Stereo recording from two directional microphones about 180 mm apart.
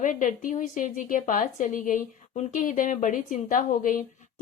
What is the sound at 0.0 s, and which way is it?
Speech, 45° left (ahead or behind).